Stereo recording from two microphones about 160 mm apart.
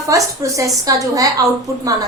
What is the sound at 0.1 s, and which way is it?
A woman's voice, 20° right (ahead or behind).